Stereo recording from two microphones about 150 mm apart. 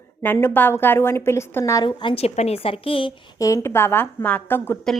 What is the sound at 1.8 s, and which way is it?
A woman's voice, 35° left (ahead or behind).